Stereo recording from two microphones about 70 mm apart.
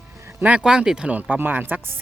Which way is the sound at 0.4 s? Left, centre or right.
Centre.